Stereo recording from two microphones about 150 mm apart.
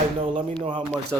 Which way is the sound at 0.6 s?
35° right (ahead or behind).